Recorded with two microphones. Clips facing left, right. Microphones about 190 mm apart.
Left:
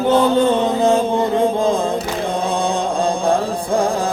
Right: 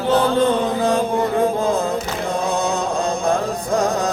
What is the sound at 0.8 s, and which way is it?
Mantra, 25° left (ahead or behind).